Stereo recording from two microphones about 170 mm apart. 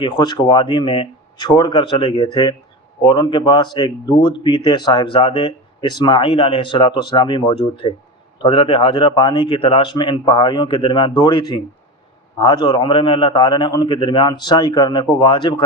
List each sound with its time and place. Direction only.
0.0 s speech: 25° left (ahead or behind)